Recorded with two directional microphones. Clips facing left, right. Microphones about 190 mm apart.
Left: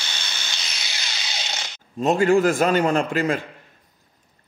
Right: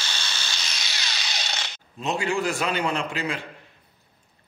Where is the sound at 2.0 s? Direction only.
50° left (ahead or behind).